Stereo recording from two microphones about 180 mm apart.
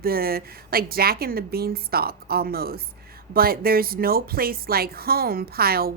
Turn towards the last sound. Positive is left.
turn(degrees=-55)  # may be behind; listen again after turning